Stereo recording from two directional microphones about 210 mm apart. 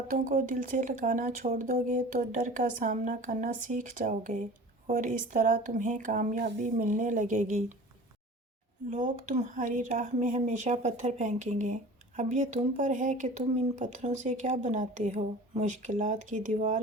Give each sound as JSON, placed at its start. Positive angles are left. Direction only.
{"t": 0.1, "sound": "speech", "side_deg": -40}
{"t": 8.9, "sound": "speech", "side_deg": -40}